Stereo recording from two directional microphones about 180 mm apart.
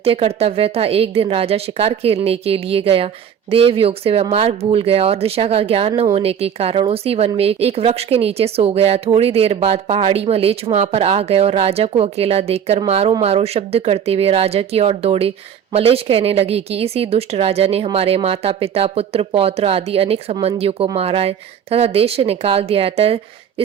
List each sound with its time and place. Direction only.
0.0 s a woman's voice: 35° right (ahead or behind)